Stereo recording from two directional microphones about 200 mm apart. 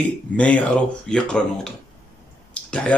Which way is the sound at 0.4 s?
5° left (ahead or behind).